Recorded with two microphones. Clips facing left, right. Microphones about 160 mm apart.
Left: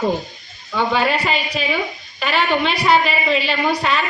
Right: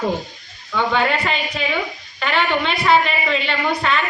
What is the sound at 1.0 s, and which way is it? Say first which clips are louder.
A woman's voice: left 1 dB; 15° left (ahead or behind).